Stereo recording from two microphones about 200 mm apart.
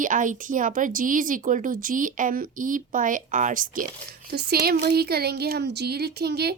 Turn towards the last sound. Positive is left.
turn(degrees=-55)  # may be behind; listen again after turning